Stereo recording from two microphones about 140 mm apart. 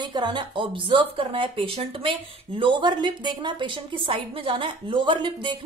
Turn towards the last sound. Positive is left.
turn(degrees=-35)  # may be behind; listen again after turning